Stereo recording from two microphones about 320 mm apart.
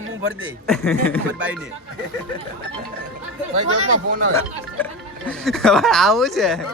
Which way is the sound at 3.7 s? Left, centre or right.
Right.